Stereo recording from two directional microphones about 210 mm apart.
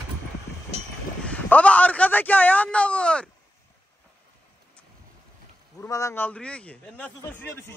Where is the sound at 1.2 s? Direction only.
5° left (ahead or behind).